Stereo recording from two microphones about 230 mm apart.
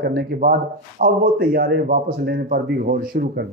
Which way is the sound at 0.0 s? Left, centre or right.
Right.